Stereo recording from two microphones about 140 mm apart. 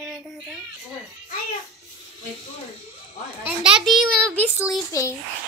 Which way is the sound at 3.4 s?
5° right (ahead or behind).